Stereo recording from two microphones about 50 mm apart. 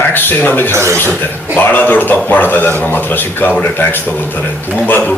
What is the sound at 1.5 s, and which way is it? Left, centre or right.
A man's voice, left.